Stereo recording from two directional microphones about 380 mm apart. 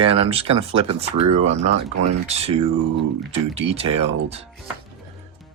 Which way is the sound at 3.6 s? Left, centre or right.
Centre.